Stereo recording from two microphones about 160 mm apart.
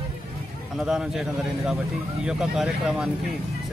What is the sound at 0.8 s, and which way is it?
Speech, centre (ahead or behind).